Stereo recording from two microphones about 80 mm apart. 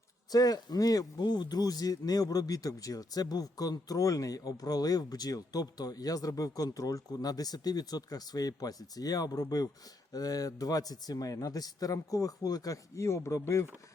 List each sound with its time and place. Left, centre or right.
0.3 s speech: left